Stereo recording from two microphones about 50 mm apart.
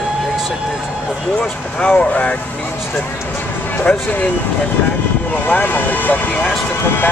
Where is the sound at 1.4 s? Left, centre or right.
Centre.